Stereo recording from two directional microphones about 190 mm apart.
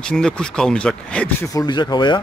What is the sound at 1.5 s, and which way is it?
Speech, 20° left (ahead or behind).